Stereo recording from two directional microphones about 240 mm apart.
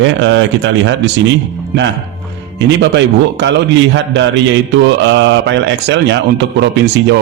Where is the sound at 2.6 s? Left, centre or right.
Right.